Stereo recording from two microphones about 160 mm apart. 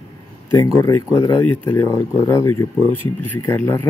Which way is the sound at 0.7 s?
20° left (ahead or behind).